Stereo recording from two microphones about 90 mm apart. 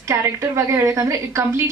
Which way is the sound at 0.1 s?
30° right (ahead or behind).